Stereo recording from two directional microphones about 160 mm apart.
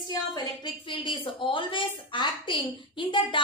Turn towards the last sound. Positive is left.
turn(degrees=30)  # may be behind; listen again after turning